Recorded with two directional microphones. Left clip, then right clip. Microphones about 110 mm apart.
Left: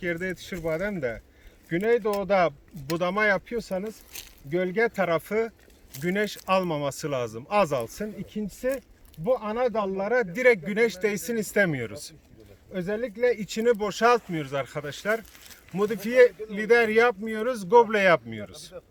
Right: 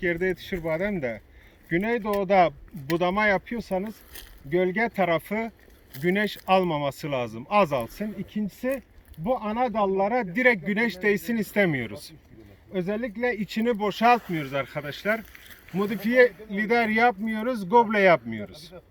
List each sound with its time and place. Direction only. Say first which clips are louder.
0.0 s speech: right 4 dB; 55° left (ahead or behind)